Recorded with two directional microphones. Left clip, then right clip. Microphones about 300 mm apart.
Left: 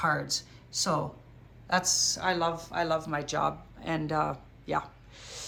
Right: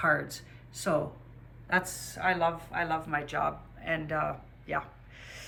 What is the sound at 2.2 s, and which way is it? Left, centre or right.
A woman's voice, centre.